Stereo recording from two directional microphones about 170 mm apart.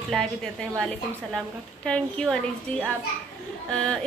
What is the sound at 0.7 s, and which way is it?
A woman's voice, 5° left (ahead or behind).